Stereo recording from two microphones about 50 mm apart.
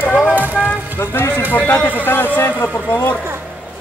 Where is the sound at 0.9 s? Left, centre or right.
Left.